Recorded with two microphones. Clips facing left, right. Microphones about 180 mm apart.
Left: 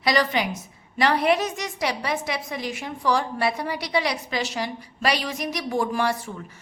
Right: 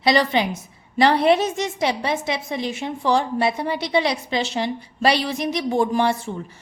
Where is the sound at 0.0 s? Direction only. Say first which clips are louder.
Right 4 dB; 25° right (ahead or behind).